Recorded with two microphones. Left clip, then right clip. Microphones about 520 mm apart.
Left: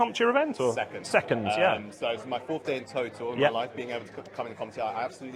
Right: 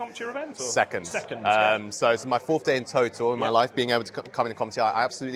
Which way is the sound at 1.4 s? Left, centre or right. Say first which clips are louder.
Right 4 dB; right.